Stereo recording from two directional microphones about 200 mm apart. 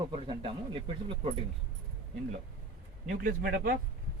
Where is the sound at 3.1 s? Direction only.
50° right (ahead or behind).